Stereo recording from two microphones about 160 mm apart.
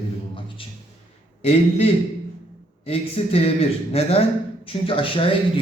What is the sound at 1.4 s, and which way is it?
A man's voice, 40° left (ahead or behind).